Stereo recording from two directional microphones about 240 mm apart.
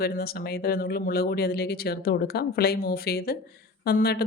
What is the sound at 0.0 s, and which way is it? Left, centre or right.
Speech, left.